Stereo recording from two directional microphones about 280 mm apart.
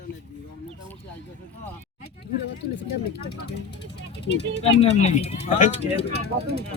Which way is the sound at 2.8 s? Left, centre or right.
Left.